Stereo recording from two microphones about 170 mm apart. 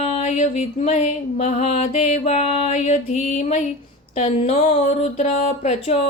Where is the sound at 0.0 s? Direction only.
40° left (ahead or behind).